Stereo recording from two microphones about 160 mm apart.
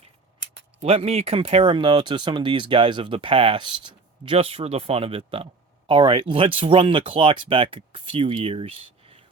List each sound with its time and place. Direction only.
0.8 s speech: 40° right (ahead or behind)